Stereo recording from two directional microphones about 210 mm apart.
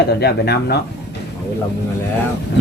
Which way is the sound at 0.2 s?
50° left (ahead or behind).